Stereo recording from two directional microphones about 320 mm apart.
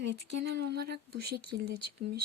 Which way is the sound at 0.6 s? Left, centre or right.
Right.